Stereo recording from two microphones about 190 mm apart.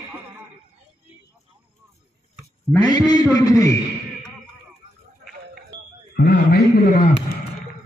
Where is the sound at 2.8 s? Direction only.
20° left (ahead or behind).